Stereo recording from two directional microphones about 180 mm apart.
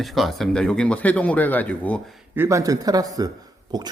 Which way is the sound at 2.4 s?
15° right (ahead or behind).